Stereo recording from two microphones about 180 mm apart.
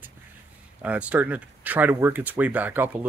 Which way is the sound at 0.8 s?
5° right (ahead or behind).